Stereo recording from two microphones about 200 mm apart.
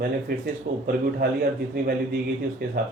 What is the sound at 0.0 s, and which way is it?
Speech, 50° right (ahead or behind).